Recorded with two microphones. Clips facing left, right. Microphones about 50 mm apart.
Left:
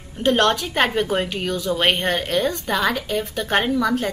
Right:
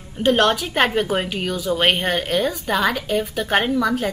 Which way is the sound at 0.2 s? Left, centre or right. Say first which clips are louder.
Right 1 dB; centre.